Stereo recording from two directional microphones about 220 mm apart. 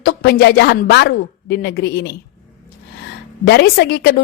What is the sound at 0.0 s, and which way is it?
A woman's voice, 45° left (ahead or behind).